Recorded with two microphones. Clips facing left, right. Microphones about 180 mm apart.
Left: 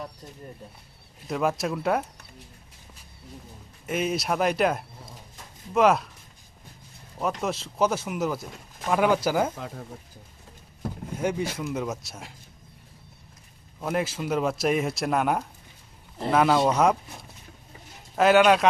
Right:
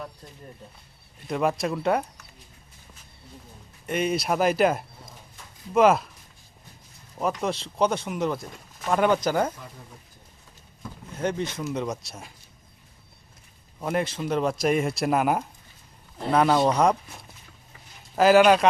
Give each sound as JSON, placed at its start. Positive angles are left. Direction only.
{"t": 1.3, "sound": "a man's voice", "side_deg": 0}
{"t": 3.8, "sound": "a man's voice", "side_deg": 0}
{"t": 7.2, "sound": "a man's voice", "side_deg": 0}
{"t": 9.6, "sound": "speech", "side_deg": 75}
{"t": 11.1, "sound": "a man's voice", "side_deg": 10}
{"t": 13.7, "sound": "a man's voice", "side_deg": 0}
{"t": 18.2, "sound": "a man's voice", "side_deg": 0}